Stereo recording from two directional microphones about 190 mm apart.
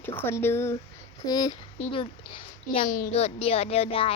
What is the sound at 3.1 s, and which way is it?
Speech, 30° left (ahead or behind).